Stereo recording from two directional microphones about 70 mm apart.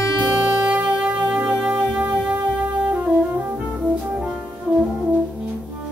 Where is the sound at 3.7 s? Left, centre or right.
Centre.